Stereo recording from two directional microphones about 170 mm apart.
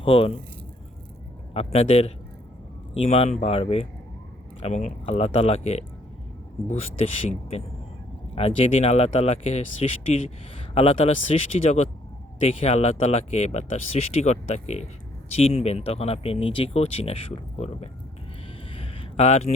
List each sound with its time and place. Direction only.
0.0 s speech: 30° left (ahead or behind)
1.5 s speech: 35° left (ahead or behind)
18.7 s a sound: 35° left (ahead or behind)